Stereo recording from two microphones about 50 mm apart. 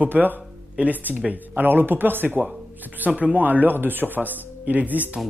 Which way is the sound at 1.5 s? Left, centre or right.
Right.